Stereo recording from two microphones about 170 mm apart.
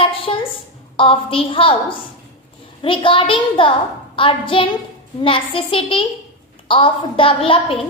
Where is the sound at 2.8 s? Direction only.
30° left (ahead or behind).